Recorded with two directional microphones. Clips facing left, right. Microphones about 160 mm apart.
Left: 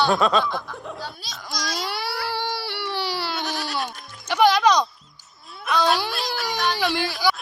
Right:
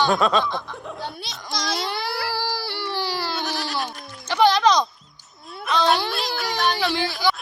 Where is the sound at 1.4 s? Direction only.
25° right (ahead or behind).